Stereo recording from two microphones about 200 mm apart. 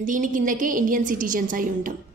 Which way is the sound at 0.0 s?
40° right (ahead or behind).